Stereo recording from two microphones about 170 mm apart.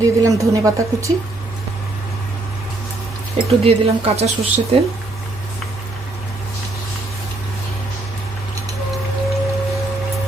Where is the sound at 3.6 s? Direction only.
35° right (ahead or behind).